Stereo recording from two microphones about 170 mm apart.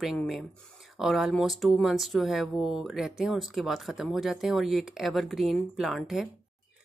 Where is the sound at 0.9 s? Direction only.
Centre (ahead or behind).